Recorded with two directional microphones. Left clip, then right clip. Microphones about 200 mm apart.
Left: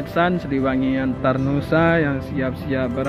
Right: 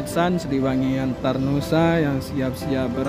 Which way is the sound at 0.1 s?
15° right (ahead or behind).